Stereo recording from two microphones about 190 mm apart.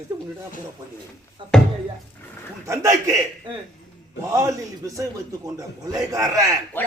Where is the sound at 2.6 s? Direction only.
15° right (ahead or behind).